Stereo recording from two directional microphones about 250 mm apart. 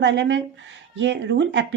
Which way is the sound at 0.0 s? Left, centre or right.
Right.